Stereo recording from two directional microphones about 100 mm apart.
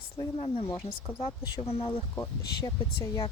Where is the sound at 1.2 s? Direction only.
70° left (ahead or behind).